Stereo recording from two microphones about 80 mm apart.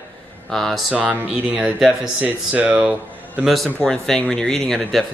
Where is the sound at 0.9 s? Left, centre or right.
Centre.